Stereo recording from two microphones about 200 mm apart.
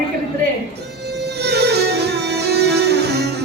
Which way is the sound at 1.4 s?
55° right (ahead or behind).